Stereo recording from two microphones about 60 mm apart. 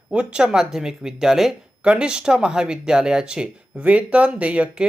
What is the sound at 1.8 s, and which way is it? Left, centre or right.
Speech, centre.